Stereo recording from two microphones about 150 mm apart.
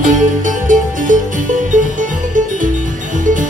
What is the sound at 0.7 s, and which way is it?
Music, 60° right (ahead or behind).